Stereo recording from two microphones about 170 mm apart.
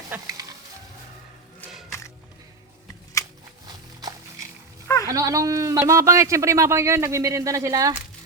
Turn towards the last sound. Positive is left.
turn(degrees=-20)  # may be behind; listen again after turning